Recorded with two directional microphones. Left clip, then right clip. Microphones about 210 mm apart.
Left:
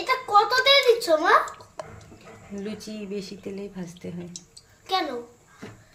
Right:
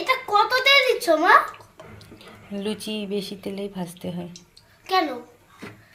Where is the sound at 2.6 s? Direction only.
15° right (ahead or behind).